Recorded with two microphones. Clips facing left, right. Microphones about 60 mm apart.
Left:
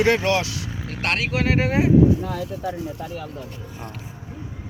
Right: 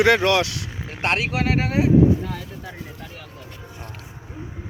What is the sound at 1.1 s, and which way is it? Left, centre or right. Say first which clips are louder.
Speech: left 3 dB; centre.